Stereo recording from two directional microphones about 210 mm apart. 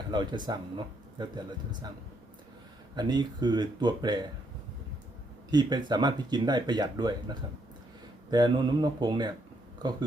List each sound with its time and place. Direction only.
0.1 s speech: 20° right (ahead or behind)
2.9 s speech: 20° right (ahead or behind)
5.5 s speech: 20° right (ahead or behind)